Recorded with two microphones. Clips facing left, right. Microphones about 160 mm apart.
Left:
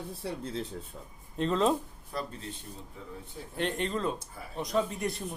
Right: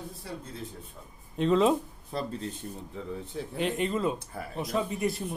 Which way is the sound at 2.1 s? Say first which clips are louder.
Right 3 dB; 25° right (ahead or behind).